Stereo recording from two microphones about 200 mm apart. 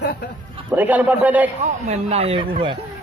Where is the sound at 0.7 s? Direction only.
10° right (ahead or behind).